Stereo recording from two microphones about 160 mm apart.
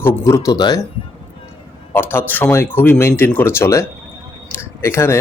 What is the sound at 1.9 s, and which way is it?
Speech, 15° left (ahead or behind).